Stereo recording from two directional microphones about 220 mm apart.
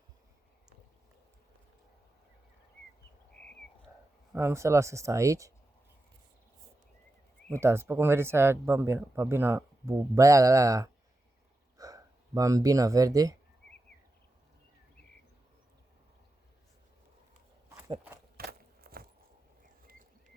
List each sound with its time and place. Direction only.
4.3 s speech: 10° right (ahead or behind)
7.5 s speech: 10° right (ahead or behind)
18.3 s a sound: 45° right (ahead or behind)